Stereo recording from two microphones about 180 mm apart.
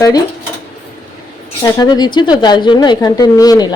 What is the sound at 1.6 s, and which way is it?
A woman's voice, 20° left (ahead or behind).